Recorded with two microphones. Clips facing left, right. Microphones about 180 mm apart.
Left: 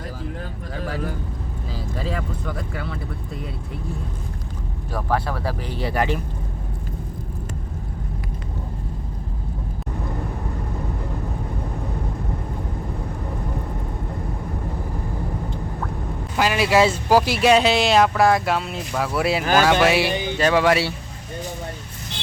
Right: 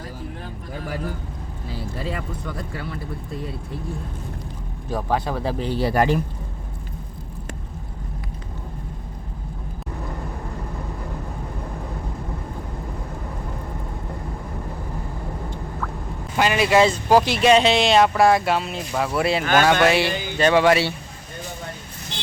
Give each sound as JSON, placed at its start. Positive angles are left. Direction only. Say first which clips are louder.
{"t": 4.9, "sound": "speech", "louder": "right 1 dB", "side_deg": -20}
{"t": 16.4, "sound": "speech", "louder": "right 1 dB", "side_deg": 5}